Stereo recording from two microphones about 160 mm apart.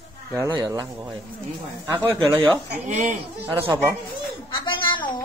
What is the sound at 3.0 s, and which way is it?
Speech, 15° right (ahead or behind).